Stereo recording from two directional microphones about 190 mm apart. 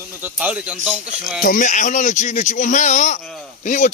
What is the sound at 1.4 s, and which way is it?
Speech, 45° left (ahead or behind).